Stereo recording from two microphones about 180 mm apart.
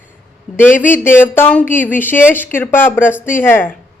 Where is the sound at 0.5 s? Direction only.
10° left (ahead or behind).